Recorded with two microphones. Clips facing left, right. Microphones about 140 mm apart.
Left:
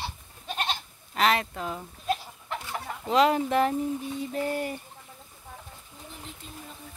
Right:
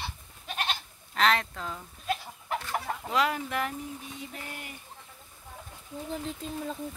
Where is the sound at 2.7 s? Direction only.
25° left (ahead or behind).